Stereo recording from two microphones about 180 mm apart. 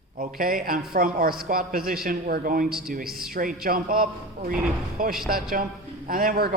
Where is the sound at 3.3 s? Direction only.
55° right (ahead or behind).